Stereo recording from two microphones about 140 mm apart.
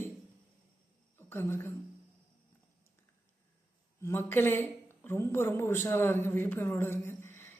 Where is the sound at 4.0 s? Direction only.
15° left (ahead or behind).